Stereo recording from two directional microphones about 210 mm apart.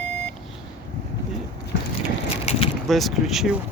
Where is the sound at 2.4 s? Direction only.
30° left (ahead or behind).